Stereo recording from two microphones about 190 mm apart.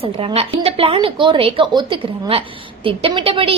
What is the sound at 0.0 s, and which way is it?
A woman's voice, 30° right (ahead or behind).